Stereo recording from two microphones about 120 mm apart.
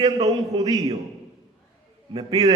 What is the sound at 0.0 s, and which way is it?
Speech, 30° right (ahead or behind).